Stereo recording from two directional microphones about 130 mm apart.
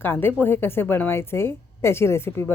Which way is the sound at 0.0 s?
15° left (ahead or behind).